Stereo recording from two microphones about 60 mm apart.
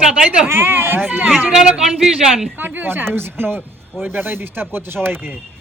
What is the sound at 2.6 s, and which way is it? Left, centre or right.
Speech, right.